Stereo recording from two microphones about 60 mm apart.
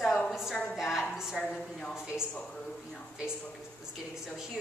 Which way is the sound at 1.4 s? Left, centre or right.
Centre.